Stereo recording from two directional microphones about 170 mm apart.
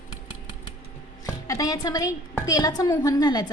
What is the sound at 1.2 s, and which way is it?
Music, 20° left (ahead or behind).